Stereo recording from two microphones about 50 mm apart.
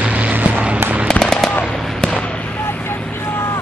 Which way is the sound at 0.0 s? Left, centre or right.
Right.